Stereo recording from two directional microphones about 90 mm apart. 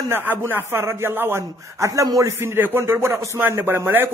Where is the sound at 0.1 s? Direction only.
25° right (ahead or behind).